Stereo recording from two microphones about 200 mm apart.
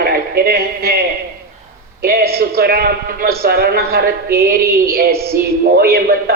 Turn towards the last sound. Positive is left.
turn(degrees=-50)  # may be behind; listen again after turning